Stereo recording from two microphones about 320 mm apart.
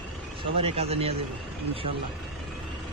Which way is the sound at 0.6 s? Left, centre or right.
Centre.